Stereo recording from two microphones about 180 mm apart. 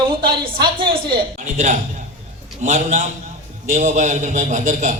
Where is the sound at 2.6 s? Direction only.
40° right (ahead or behind).